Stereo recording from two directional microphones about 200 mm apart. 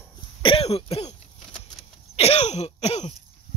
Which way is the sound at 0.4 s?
25° left (ahead or behind).